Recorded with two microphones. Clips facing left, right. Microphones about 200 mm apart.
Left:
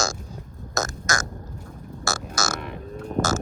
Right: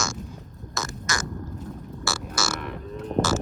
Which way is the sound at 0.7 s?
45° left (ahead or behind).